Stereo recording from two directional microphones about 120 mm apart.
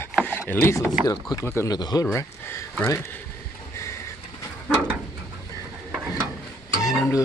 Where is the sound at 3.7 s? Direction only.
25° left (ahead or behind).